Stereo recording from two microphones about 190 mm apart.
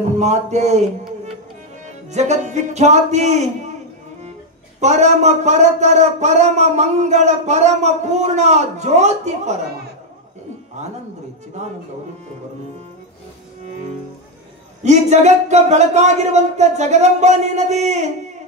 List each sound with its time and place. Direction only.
0.2 s speech: 35° right (ahead or behind)
4.7 s speech: 35° right (ahead or behind)
10.8 s speech: 35° right (ahead or behind)
14.8 s speech: 35° right (ahead or behind)